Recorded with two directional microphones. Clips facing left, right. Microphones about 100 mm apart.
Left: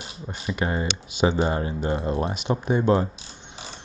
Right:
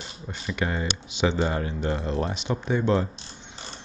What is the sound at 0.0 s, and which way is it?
Speech, 10° left (ahead or behind).